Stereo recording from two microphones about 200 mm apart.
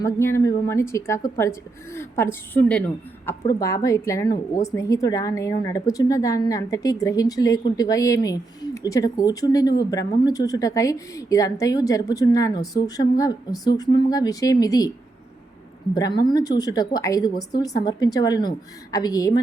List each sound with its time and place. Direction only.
0.0 s a woman's voice: 15° left (ahead or behind)
16.3 s a woman's voice: 20° left (ahead or behind)